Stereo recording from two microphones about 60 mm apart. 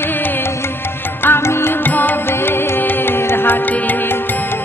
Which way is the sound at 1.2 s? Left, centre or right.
Left.